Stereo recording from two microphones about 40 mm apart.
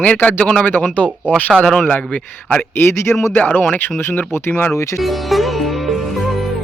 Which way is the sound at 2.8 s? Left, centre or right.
Left.